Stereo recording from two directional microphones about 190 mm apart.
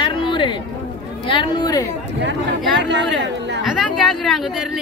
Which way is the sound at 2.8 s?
65° right (ahead or behind).